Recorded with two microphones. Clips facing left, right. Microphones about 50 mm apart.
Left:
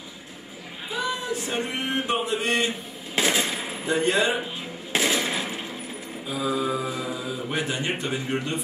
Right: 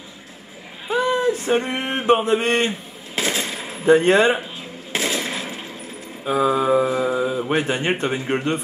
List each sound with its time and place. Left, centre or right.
0.8 s male singing: right
3.3 s machine gun: centre
3.8 s speech: right
4.9 s machine gun: centre
6.2 s speech: right